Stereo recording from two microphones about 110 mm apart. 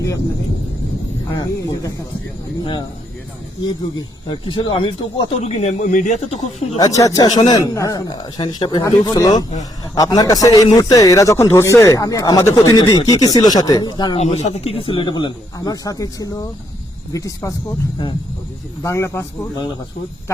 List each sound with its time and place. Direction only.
1.4 s speech: 30° left (ahead or behind)
3.6 s speech: 40° left (ahead or behind)
5.4 s speech: 90° left
6.7 s speech: 35° left (ahead or behind)
8.1 s speech: 45° left (ahead or behind)
8.8 s speech: 35° left (ahead or behind)
14.2 s speech: 75° left (ahead or behind); by 15.3 s 45° left (ahead or behind)
15.5 s speech: 35° left (ahead or behind)
18.8 s speech: 25° left (ahead or behind)